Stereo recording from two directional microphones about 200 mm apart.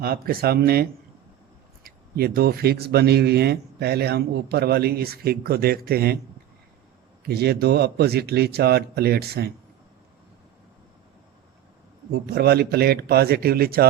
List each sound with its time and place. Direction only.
0.0 s speech: 50° right (ahead or behind)
7.3 s speech: 55° right (ahead or behind)
12.1 s speech: 50° right (ahead or behind)